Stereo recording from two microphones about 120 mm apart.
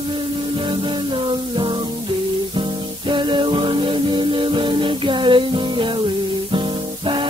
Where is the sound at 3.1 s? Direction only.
45° right (ahead or behind).